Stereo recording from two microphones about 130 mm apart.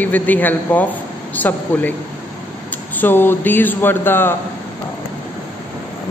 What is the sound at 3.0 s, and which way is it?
A man's voice, 15° left (ahead or behind).